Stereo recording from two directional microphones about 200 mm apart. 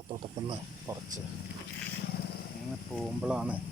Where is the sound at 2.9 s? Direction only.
5° right (ahead or behind).